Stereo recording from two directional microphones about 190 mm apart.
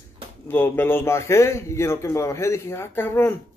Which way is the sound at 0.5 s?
10° left (ahead or behind).